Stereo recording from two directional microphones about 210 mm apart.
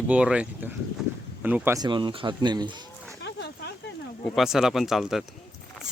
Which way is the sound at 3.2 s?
55° left (ahead or behind).